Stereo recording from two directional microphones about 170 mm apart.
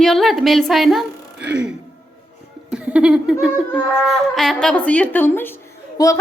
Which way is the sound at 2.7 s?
5° right (ahead or behind).